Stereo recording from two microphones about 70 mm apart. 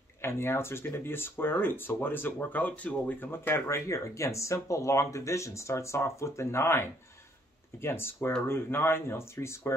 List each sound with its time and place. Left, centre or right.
0.2 s speech: left